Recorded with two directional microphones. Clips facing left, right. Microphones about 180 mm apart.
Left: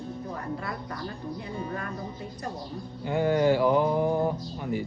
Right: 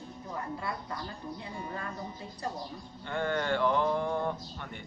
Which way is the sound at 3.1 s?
10° left (ahead or behind).